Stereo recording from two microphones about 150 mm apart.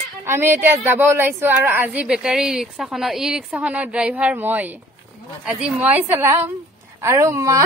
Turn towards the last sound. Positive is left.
turn(degrees=-20)  # may be behind; listen again after turning